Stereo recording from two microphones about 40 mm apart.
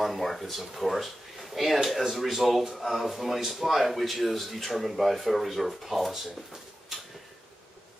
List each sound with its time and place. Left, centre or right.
0.0 s a man's voice: centre